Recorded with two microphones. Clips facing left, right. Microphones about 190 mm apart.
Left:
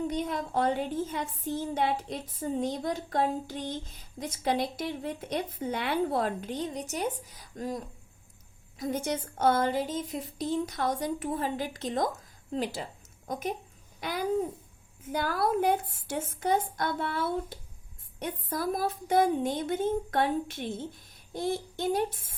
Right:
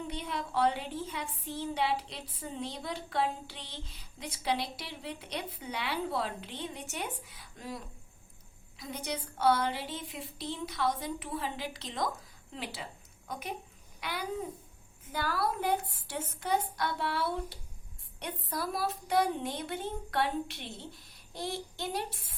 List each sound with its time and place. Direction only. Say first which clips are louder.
0.1 s a woman's voice: left 5 dB; 45° left (ahead or behind)
8.8 s a woman's voice: left 7 dB; 45° left (ahead or behind)